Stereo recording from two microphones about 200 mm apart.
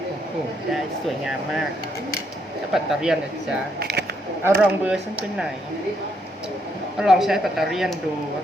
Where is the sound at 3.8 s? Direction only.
55° right (ahead or behind).